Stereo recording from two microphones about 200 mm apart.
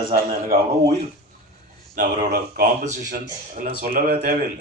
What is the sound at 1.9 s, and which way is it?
A man's voice, 45° right (ahead or behind).